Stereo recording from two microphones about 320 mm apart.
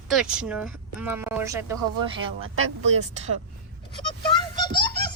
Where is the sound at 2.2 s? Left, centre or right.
Right.